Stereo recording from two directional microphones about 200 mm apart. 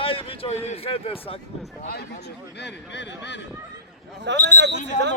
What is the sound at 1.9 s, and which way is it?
Speech, 55° left (ahead or behind).